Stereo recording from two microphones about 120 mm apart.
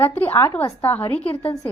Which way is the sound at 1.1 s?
50° left (ahead or behind).